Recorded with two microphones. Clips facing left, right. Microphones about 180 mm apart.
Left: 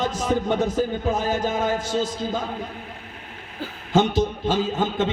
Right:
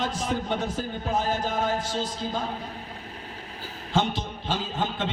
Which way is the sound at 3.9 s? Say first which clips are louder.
Left 7 dB; 45° left (ahead or behind).